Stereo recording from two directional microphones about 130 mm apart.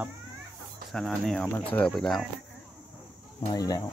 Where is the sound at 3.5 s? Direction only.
30° left (ahead or behind).